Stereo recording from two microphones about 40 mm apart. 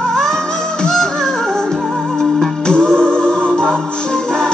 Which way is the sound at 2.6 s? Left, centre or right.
Centre.